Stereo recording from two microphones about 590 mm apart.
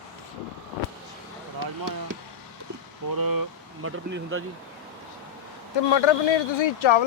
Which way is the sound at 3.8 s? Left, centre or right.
Right.